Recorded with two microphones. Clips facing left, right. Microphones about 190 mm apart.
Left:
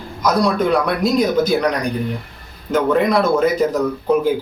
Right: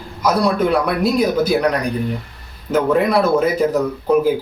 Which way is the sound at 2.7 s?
5° right (ahead or behind).